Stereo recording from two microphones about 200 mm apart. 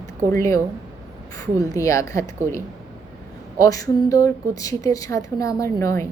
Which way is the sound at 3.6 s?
15° left (ahead or behind).